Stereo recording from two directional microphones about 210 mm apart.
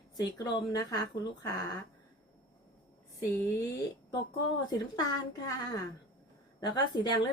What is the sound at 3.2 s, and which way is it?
Speech, 15° left (ahead or behind).